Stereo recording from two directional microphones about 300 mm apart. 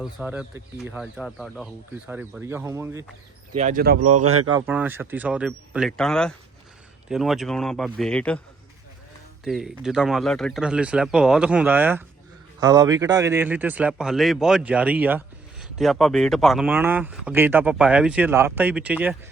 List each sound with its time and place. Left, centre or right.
0.0 s speech: centre
3.5 s speech: right
4.1 s speech: right
4.4 s speech: centre
9.4 s speech: centre